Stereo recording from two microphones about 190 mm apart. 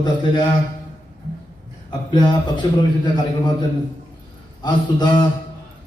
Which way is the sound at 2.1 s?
25° left (ahead or behind).